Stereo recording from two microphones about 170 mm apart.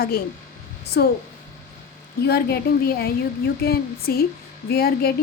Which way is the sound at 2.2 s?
70° left (ahead or behind).